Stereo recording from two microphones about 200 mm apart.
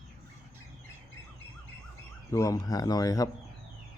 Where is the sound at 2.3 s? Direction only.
15° left (ahead or behind).